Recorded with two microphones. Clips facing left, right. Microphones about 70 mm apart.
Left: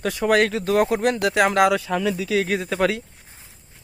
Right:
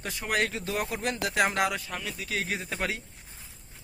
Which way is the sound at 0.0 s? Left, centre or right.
Left.